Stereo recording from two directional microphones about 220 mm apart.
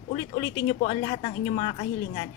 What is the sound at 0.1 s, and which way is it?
Speech, 20° left (ahead or behind).